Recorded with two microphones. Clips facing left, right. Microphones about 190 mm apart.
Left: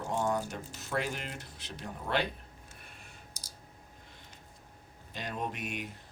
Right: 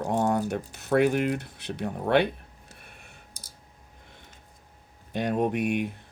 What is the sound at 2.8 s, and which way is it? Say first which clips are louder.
Clicking: right 2 dB; 60° right (ahead or behind).